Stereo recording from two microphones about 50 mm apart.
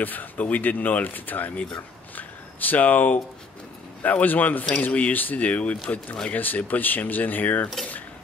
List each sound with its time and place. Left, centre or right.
0.0 s speech: left
2.1 s a sound: left
4.0 s speech: left